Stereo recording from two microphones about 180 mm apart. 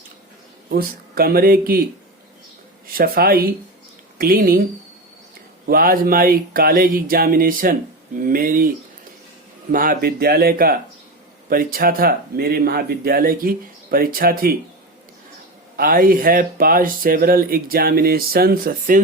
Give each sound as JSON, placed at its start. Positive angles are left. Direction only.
{"t": 0.7, "sound": "speech", "side_deg": -55}
{"t": 2.8, "sound": "speech", "side_deg": -55}
{"t": 5.6, "sound": "speech", "side_deg": -55}
{"t": 9.7, "sound": "speech", "side_deg": -50}
{"t": 15.8, "sound": "speech", "side_deg": -50}